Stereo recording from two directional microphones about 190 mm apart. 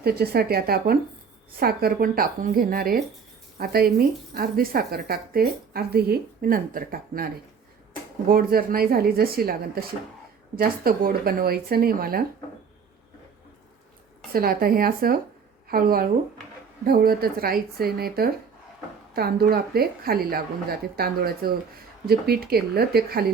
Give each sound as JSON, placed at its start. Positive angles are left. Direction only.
{"t": 0.0, "sound": "speech", "side_deg": -55}
{"t": 8.3, "sound": "speech", "side_deg": -50}
{"t": 14.3, "sound": "speech", "side_deg": -50}